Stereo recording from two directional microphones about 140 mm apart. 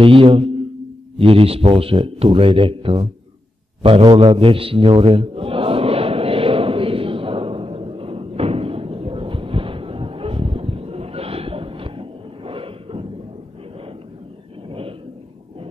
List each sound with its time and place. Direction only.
0.0 s speech: 40° right (ahead or behind)
3.8 s mantra: 35° right (ahead or behind)
14.7 s vehicle: 40° right (ahead or behind)